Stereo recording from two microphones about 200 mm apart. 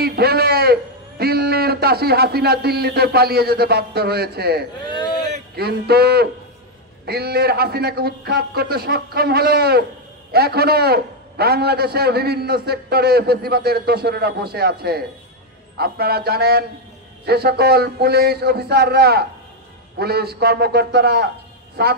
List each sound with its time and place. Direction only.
0.0 s a man's voice: 50° right (ahead or behind)
4.9 s a sound: 20° left (ahead or behind)
5.6 s a man's voice: 50° right (ahead or behind)